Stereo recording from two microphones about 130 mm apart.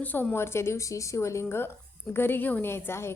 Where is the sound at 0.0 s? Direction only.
15° left (ahead or behind).